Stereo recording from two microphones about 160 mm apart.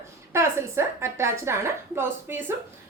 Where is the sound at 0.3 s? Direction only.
15° right (ahead or behind).